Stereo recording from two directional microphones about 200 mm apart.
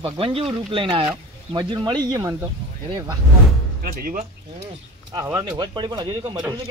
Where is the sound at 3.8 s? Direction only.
45° right (ahead or behind).